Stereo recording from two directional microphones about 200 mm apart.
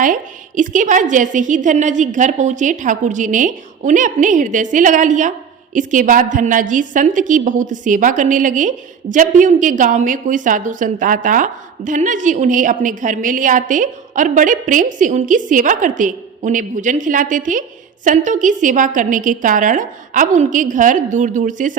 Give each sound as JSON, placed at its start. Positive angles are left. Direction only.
{"t": 0.0, "sound": "a woman's voice", "side_deg": -40}